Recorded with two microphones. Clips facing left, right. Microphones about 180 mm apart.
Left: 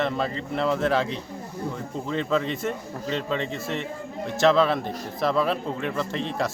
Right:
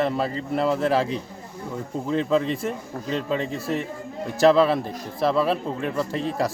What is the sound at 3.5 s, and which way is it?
Speech, 40° right (ahead or behind).